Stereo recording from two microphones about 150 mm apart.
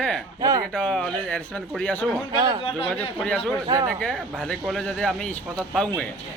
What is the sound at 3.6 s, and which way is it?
Speech, 20° right (ahead or behind).